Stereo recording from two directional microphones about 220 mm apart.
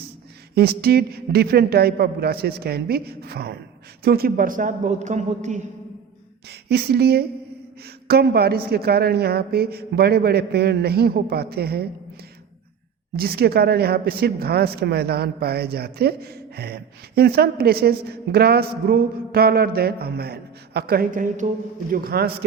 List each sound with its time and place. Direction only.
0.5 s a woman's voice: 45° right (ahead or behind)
6.5 s speech: 45° right (ahead or behind)
13.1 s speech: 45° right (ahead or behind)